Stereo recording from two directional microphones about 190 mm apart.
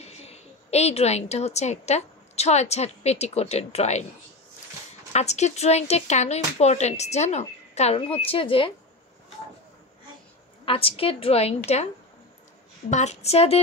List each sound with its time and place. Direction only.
0.0 s a woman's voice: 35° left (ahead or behind)
5.1 s speech: 35° left (ahead or behind)
10.6 s a woman's voice: 30° left (ahead or behind)
12.9 s speech: 35° left (ahead or behind)